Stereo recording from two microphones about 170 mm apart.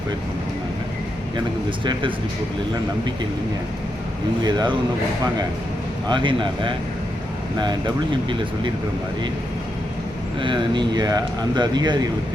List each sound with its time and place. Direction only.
1.8 s speech: 30° right (ahead or behind)
4.4 s speech: 25° right (ahead or behind)
6.1 s speech: 30° right (ahead or behind)
10.4 s speech: 30° right (ahead or behind)